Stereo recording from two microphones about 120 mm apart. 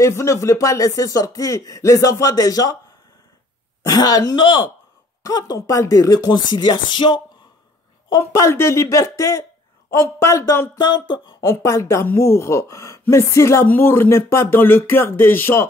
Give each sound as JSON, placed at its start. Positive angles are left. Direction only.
{"t": 0.0, "sound": "speech", "side_deg": 25}
{"t": 3.8, "sound": "speech", "side_deg": 30}
{"t": 8.1, "sound": "speech", "side_deg": 25}
{"t": 10.8, "sound": "speech", "side_deg": 40}
{"t": 11.2, "sound": "speech", "side_deg": 25}